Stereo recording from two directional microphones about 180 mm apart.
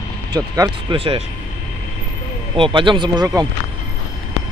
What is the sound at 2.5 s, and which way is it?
Speech, 30° right (ahead or behind).